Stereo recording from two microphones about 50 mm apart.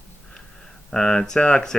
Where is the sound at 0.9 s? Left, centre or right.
Centre.